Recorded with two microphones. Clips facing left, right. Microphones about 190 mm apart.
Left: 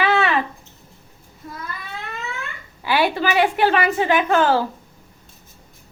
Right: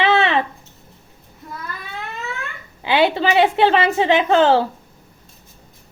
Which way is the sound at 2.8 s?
20° right (ahead or behind).